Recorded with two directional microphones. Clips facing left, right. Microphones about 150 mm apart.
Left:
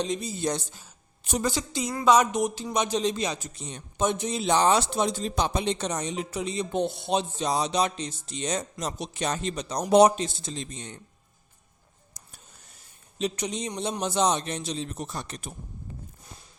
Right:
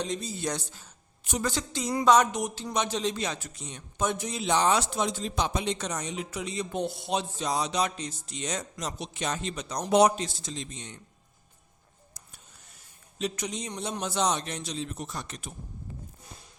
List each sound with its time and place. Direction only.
0.0 s a man's voice: 15° left (ahead or behind)
2.0 s a sound: 5° left (ahead or behind)
2.3 s a man's voice: 20° left (ahead or behind)
3.5 s a man's voice: 30° left (ahead or behind)
4.4 s a man's voice: 35° left (ahead or behind)
10.5 s speech: 40° left (ahead or behind)
13.1 s a man's voice: 25° left (ahead or behind)